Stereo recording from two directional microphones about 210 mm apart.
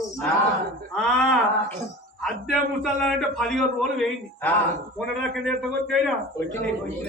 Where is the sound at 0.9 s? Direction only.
Centre (ahead or behind).